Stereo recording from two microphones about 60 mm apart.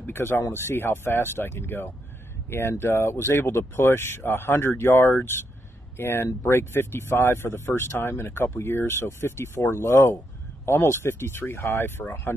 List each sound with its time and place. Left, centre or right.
0.0 s speech: left
2.8 s speech: left